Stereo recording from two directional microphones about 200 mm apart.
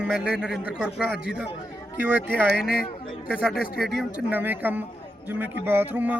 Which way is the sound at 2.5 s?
50° left (ahead or behind).